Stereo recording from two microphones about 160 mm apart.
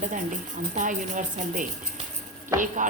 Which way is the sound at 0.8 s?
50° right (ahead or behind).